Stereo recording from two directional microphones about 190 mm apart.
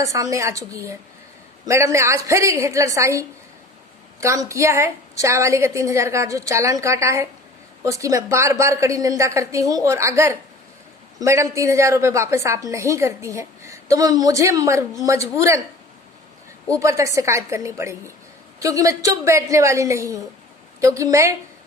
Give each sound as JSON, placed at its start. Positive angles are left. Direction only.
{"t": 0.0, "sound": "a woman's voice", "side_deg": -15}
{"t": 16.6, "sound": "a woman's voice", "side_deg": -15}